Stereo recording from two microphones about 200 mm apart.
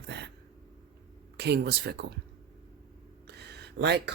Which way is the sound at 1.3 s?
55° right (ahead or behind).